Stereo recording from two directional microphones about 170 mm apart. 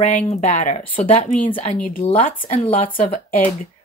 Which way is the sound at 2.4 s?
40° left (ahead or behind).